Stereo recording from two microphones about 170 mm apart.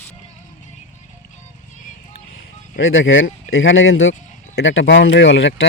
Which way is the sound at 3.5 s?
90° left.